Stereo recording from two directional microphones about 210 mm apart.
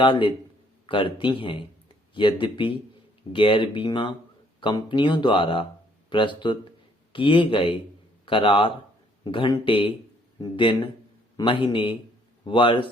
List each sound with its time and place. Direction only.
0.0 s speech: 25° left (ahead or behind)